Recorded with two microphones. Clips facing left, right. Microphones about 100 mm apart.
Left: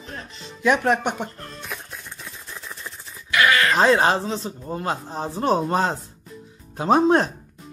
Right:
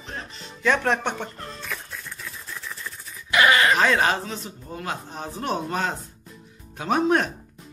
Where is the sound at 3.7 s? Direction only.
30° left (ahead or behind).